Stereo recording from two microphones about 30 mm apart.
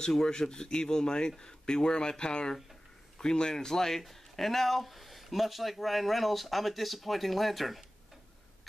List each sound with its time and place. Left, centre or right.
0.2 s speech: left; by 7.8 s centre